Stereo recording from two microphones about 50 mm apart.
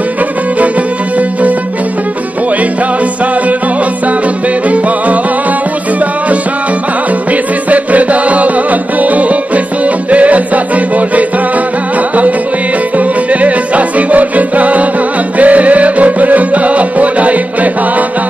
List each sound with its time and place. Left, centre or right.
4.6 s music: right
7.7 s music: right
12.9 s music: right